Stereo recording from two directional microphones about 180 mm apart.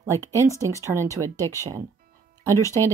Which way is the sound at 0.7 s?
15° right (ahead or behind).